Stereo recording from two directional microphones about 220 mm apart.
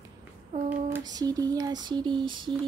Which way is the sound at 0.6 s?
15° right (ahead or behind).